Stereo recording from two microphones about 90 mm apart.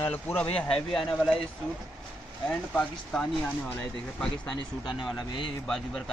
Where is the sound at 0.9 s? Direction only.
5° left (ahead or behind).